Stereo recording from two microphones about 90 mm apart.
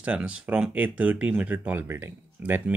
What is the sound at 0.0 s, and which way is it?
Speech, 15° right (ahead or behind).